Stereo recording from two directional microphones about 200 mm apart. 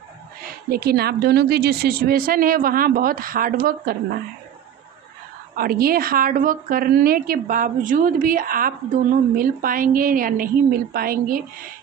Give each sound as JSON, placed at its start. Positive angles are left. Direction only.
{"t": 0.7, "sound": "a woman's voice", "side_deg": -50}
{"t": 5.6, "sound": "a woman's voice", "side_deg": -50}